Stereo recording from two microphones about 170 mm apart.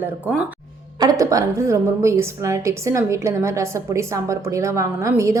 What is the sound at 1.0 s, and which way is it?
A woman's voice, 20° right (ahead or behind).